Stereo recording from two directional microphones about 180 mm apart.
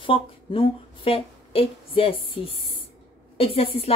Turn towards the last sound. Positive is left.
turn(degrees=30)  # may be behind; listen again after turning